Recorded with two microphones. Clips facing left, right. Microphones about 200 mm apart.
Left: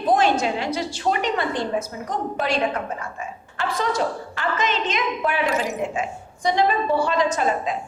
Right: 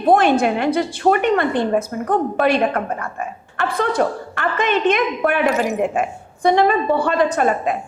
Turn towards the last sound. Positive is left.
turn(degrees=-60)  # may be behind; listen again after turning